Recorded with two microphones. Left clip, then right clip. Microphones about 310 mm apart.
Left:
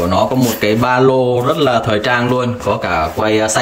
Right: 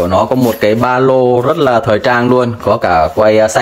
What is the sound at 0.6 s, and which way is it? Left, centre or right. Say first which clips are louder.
Speech: even; centre.